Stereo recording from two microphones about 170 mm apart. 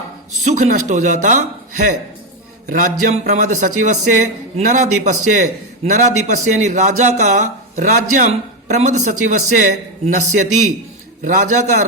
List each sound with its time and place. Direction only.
0.4 s a man's voice: 45° right (ahead or behind)